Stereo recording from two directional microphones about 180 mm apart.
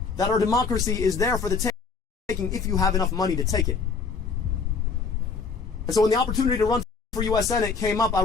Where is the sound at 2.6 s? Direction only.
20° left (ahead or behind).